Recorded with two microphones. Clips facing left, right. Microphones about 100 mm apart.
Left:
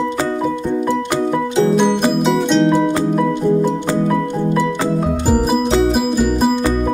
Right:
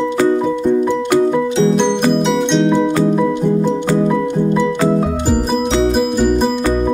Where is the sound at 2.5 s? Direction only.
Centre (ahead or behind).